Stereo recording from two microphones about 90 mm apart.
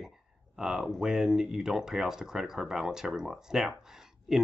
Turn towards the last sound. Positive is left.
turn(degrees=-5)  # may be behind; listen again after turning